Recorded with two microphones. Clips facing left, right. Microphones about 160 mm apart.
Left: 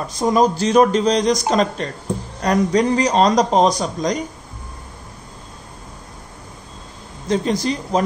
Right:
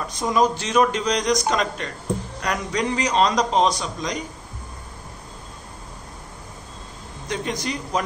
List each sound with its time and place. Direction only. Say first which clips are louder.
0.2 s a man's voice: left 5 dB; 35° left (ahead or behind)
7.2 s a man's voice: left 8 dB; 35° left (ahead or behind)